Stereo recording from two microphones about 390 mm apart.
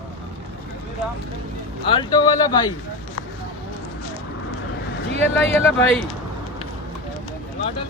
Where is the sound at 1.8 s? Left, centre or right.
Centre.